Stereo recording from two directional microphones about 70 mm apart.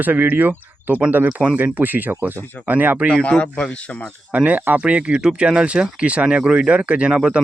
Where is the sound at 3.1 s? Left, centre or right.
Centre.